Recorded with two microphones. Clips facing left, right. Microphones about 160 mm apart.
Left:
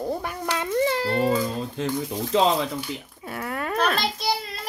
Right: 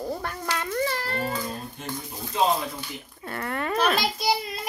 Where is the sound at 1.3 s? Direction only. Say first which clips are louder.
Left 7 dB; 90° left.